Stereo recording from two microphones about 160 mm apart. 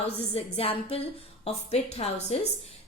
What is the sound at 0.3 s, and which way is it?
A woman's voice, 35° left (ahead or behind).